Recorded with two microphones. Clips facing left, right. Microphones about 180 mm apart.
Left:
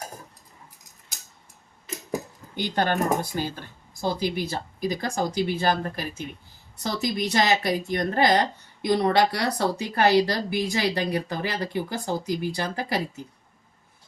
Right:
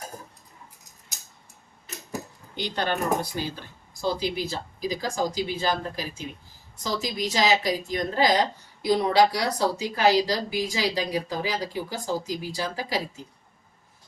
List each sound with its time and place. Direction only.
2.6 s speech: 50° left (ahead or behind)